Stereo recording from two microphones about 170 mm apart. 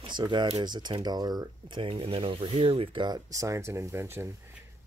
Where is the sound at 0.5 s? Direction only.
25° right (ahead or behind).